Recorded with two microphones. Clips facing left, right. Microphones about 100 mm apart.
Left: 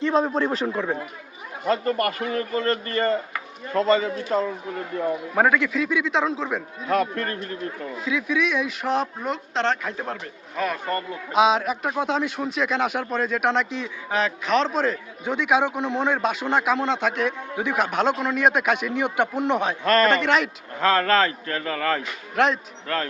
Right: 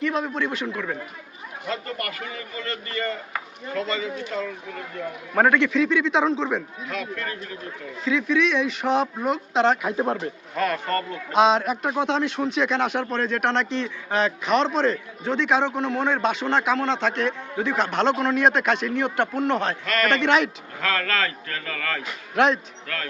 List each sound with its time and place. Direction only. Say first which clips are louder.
0.0 s a man's voice: left 4 dB; 30° left (ahead or behind)
5.3 s speech: right 3 dB; 5° left (ahead or behind)
6.8 s a man's voice: left 7 dB; 45° left (ahead or behind)
8.0 s speech: right 3 dB; 5° left (ahead or behind)
10.0 s a man's voice: right 7 dB; 20° right (ahead or behind)
10.6 s speech: right 2 dB; 10° left (ahead or behind)
19.8 s speech: left 6 dB; 40° left (ahead or behind)
20.1 s speech: even; 5° left (ahead or behind)
20.8 s a man's voice: left 6 dB; 30° left (ahead or behind)
22.4 s speech: right 1 dB; centre (ahead or behind)